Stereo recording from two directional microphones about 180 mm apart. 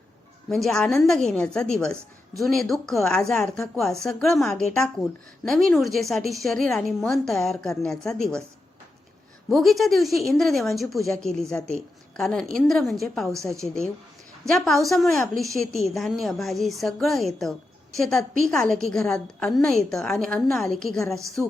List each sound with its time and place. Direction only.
0.5 s a woman's voice: 5° left (ahead or behind)
9.5 s a woman's voice: centre (ahead or behind)